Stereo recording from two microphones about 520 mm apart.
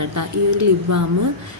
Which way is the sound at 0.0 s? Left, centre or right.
Right.